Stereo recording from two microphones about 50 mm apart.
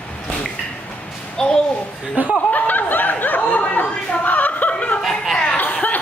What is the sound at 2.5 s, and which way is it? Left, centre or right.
Speech, left.